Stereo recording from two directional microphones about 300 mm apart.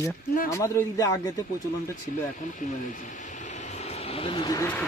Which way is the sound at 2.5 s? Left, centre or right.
Left.